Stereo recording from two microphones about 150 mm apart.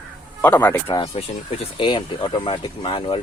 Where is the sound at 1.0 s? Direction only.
40° left (ahead or behind).